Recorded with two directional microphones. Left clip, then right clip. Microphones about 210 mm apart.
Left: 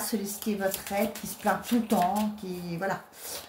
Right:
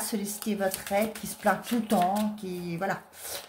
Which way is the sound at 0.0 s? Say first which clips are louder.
Left 1 dB; 35° right (ahead or behind).